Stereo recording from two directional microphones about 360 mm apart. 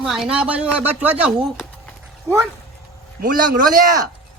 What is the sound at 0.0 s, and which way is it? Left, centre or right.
Speech, centre.